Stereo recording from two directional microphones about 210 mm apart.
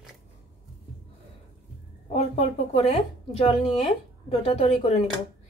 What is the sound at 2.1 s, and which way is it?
A woman's voice, 30° left (ahead or behind).